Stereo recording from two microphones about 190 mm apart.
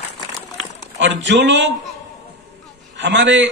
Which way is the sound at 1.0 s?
70° right (ahead or behind).